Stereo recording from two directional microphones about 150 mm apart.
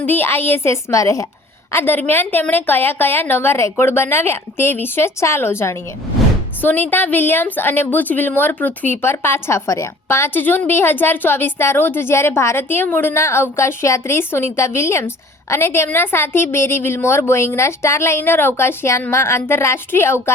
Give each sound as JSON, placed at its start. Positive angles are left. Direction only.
{"t": 0.0, "sound": "a woman's voice", "side_deg": 15}